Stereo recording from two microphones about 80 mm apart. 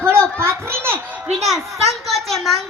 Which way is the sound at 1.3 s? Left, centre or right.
Centre.